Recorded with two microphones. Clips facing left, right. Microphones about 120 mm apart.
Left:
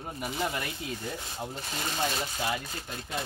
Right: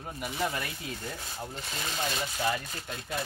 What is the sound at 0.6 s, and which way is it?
Speech, 15° left (ahead or behind).